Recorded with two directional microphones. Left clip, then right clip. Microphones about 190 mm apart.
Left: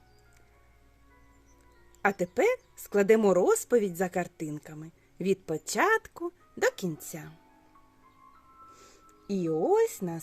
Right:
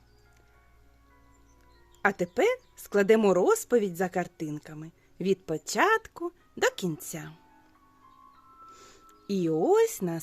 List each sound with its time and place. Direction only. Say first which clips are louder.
2.0 s speech: right 1 dB; 5° right (ahead or behind)
8.7 s music: right 2 dB; 20° right (ahead or behind)
9.6 s speech: right 2 dB; 20° right (ahead or behind)